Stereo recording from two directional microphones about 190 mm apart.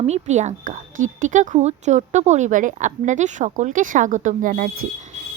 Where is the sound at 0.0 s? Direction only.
35° right (ahead or behind).